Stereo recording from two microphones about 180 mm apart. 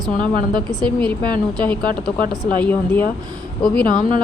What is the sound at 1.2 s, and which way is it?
Speech, 25° right (ahead or behind).